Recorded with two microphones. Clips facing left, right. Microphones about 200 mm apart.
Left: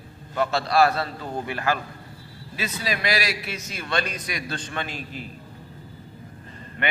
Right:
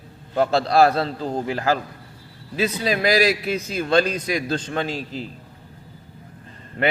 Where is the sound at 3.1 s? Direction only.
35° right (ahead or behind).